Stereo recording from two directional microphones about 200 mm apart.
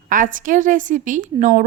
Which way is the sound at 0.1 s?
40° right (ahead or behind).